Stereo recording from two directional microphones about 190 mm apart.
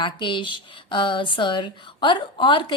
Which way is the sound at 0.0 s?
25° left (ahead or behind).